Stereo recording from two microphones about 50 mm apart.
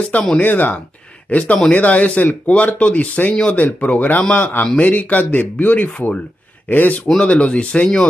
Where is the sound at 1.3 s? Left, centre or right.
Left.